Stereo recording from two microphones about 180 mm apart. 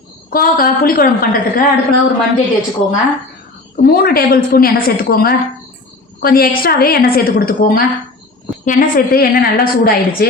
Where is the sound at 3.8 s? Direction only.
55° left (ahead or behind).